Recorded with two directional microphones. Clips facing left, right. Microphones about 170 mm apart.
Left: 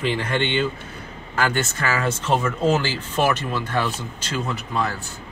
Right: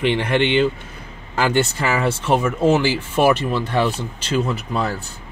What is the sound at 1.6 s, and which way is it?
Speech, 15° right (ahead or behind).